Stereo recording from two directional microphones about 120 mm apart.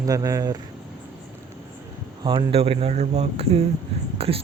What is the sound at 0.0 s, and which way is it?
Speech, 30° right (ahead or behind).